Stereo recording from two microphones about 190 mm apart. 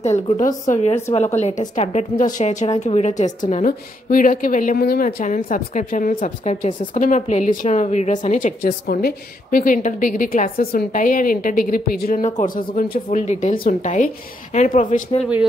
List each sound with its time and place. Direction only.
0.0 s a woman's voice: 40° left (ahead or behind)